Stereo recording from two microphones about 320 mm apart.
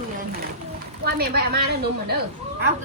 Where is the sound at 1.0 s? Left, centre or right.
Right.